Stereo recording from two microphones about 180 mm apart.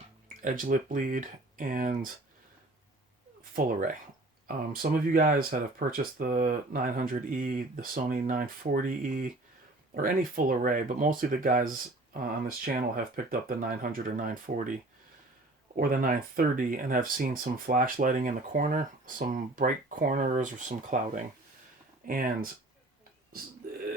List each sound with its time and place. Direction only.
0.4 s speech: 45° right (ahead or behind)
3.5 s speech: 50° right (ahead or behind)
22.0 s speech: 50° right (ahead or behind)